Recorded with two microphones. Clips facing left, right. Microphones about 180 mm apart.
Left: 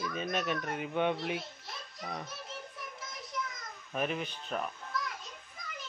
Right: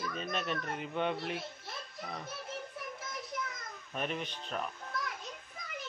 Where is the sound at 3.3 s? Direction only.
55° right (ahead or behind).